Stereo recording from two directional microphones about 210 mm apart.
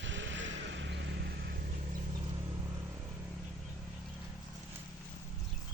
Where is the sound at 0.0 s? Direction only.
60° right (ahead or behind).